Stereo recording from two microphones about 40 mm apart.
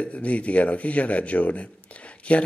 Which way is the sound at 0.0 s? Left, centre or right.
Left.